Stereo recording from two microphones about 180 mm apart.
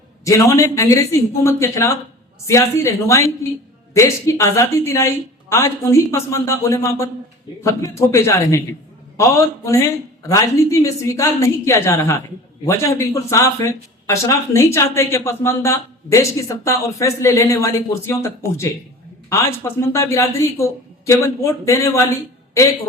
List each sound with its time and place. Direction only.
0.3 s speech: 15° left (ahead or behind)